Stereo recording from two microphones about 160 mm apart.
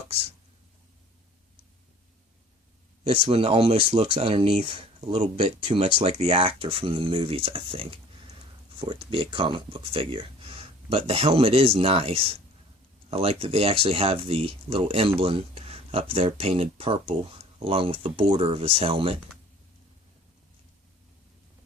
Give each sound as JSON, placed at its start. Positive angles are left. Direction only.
{"t": 3.1, "sound": "speech", "side_deg": -35}